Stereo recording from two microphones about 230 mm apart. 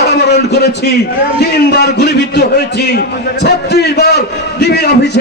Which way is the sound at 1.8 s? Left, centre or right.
Left.